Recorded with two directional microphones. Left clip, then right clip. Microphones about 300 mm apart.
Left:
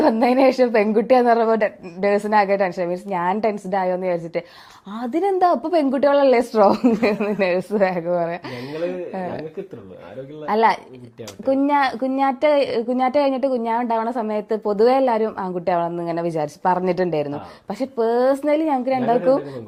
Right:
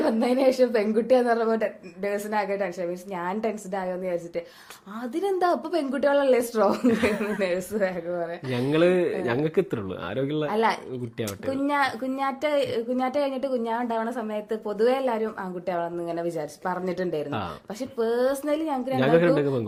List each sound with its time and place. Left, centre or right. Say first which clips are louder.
0.0 s a woman's voice: left 6 dB; left
10.4 s a woman's voice: left 9 dB; left